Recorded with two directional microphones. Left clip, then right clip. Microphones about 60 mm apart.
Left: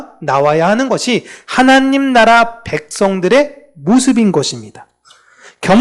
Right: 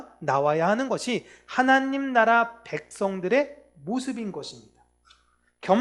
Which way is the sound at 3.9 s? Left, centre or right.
Left.